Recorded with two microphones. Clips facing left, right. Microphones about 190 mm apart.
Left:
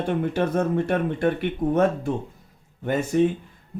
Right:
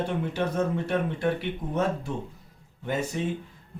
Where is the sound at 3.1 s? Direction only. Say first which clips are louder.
Left 11 dB; 55° left (ahead or behind).